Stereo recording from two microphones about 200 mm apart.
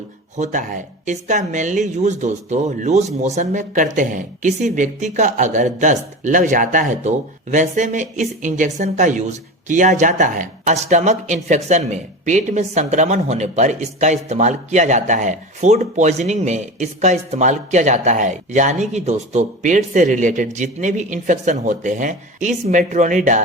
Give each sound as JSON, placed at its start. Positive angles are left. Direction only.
{"t": 0.3, "sound": "speech", "side_deg": -40}